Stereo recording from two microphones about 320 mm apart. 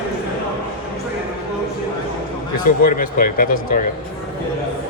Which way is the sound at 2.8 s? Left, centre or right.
Left.